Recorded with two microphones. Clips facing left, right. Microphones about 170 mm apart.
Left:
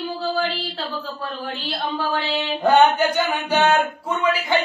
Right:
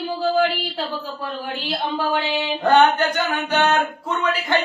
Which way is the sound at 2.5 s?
10° left (ahead or behind).